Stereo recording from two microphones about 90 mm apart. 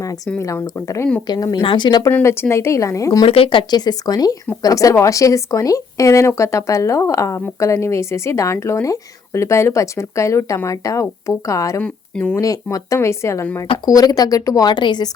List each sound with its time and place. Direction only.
0.3 s a woman's voice: 35° left (ahead or behind)
1.6 s speech: 60° left (ahead or behind)
2.0 s a woman's voice: 25° left (ahead or behind)
3.2 s a woman's voice: 90° left; by 11.8 s 35° left (ahead or behind)
11.8 s speech: 15° left (ahead or behind)
12.7 s a woman's voice: 35° left (ahead or behind)
13.7 s speech: 45° left (ahead or behind)